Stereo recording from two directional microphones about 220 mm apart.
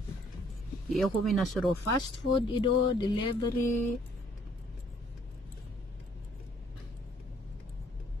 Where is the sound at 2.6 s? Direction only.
20° left (ahead or behind).